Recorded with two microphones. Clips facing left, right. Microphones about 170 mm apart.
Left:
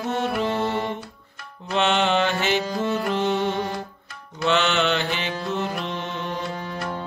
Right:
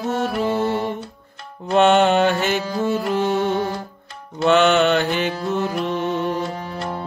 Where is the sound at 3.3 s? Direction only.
45° right (ahead or behind).